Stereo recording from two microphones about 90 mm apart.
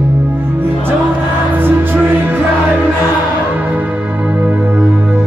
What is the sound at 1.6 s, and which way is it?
Music, 25° right (ahead or behind).